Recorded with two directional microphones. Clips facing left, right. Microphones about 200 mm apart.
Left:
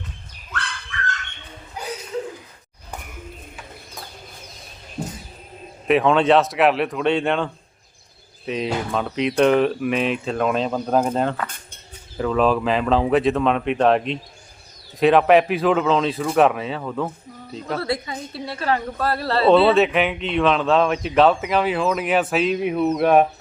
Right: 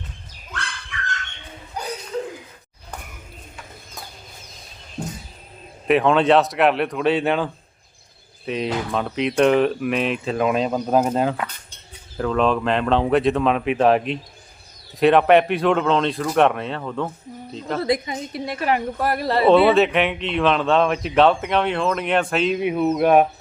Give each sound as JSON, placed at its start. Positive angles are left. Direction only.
{"t": 5.0, "sound": "a sound", "side_deg": 0}
{"t": 5.9, "sound": "speech", "side_deg": 0}
{"t": 17.7, "sound": "a woman's voice", "side_deg": -15}
{"t": 19.7, "sound": "speech", "side_deg": 0}